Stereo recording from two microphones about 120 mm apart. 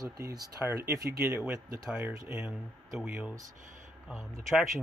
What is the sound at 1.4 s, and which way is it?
Speech, 10° right (ahead or behind).